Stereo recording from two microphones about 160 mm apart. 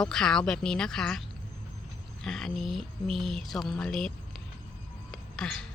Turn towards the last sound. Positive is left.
turn(degrees=5)  # may be behind; listen again after turning